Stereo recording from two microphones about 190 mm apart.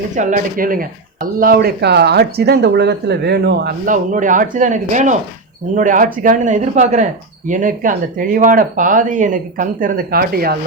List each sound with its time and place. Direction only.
0.2 s speech: 40° right (ahead or behind); by 3.8 s 60° right (ahead or behind)
3.8 s speech: 45° right (ahead or behind)